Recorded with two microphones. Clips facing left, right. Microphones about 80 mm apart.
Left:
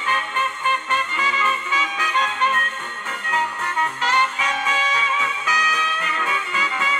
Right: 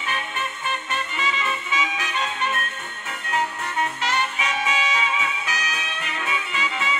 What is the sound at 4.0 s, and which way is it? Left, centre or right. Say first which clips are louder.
Music: left 4 dB; left.